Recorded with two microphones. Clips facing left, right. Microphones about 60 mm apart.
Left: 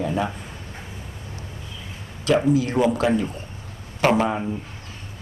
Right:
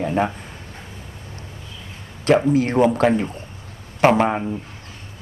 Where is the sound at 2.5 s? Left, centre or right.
Right.